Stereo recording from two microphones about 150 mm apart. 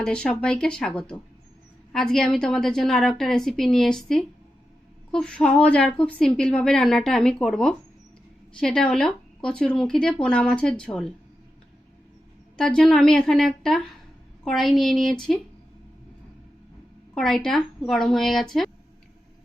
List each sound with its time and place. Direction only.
0.0 s a woman's voice: 5° left (ahead or behind)
12.5 s a woman's voice: 5° left (ahead or behind)
17.2 s a woman's voice: centre (ahead or behind)